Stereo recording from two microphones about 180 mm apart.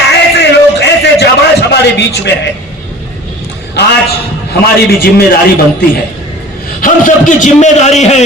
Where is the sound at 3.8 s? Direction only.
70° left (ahead or behind).